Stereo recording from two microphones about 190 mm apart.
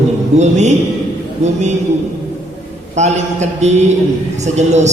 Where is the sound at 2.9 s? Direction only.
35° right (ahead or behind).